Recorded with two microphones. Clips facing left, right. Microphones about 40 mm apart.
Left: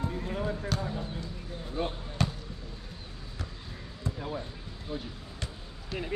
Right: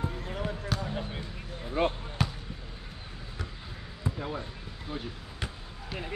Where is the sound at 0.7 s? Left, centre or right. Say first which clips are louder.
Even; centre.